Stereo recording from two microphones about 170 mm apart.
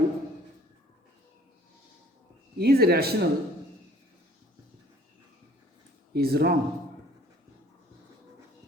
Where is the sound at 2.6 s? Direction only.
65° right (ahead or behind).